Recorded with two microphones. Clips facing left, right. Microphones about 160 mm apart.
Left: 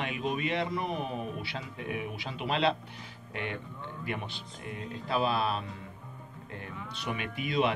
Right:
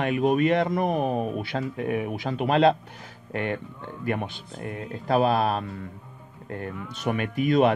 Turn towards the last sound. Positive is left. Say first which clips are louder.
# right 9 dB
turn(degrees=-50)  # may be behind; listen again after turning